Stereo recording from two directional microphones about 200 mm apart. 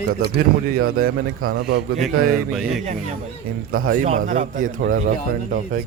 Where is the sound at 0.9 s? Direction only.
45° right (ahead or behind).